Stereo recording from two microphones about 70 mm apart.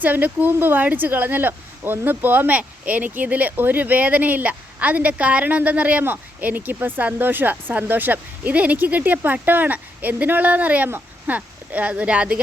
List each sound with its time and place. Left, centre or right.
0.0 s speech: right